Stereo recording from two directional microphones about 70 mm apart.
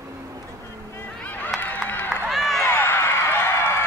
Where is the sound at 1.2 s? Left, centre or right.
Left.